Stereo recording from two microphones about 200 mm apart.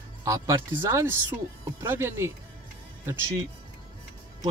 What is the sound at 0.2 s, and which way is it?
Speech, 15° right (ahead or behind).